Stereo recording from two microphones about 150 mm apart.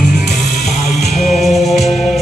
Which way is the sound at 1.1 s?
Centre (ahead or behind).